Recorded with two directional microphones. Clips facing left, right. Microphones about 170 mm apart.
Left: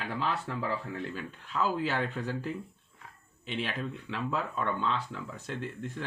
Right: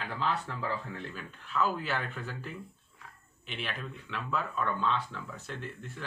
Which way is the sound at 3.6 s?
30° left (ahead or behind).